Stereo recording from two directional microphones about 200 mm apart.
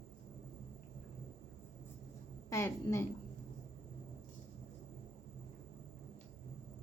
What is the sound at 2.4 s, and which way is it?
Speech, 15° left (ahead or behind).